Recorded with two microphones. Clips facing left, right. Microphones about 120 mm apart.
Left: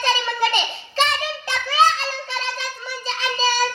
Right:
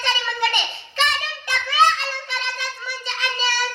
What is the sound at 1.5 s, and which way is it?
Child singing, 30° left (ahead or behind).